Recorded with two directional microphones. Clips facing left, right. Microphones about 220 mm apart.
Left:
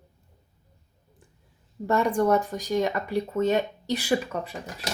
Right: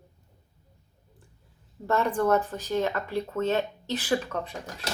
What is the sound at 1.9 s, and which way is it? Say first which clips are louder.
Speech: left 2 dB; 15° left (ahead or behind).